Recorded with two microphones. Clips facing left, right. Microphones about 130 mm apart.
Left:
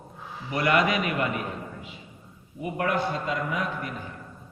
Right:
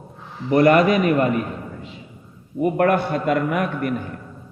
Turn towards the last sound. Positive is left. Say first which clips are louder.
# right 8 dB
turn(degrees=-60)  # may be behind; listen again after turning